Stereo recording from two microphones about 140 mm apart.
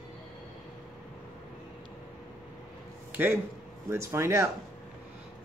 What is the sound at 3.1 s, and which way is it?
Speech, 15° right (ahead or behind).